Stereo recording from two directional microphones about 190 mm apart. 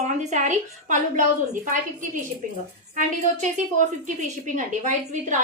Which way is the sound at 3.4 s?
40° right (ahead or behind).